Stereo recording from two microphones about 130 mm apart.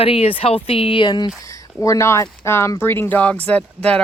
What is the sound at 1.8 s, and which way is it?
Speech, 25° left (ahead or behind).